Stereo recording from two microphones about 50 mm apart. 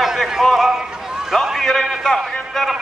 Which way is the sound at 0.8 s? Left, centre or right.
Centre.